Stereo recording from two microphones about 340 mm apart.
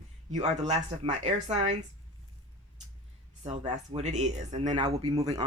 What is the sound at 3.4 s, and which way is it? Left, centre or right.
Speech, centre.